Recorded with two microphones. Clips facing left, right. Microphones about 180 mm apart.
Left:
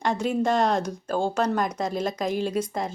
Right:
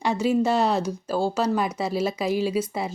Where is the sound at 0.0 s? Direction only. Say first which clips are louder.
Right 2 dB; 10° right (ahead or behind).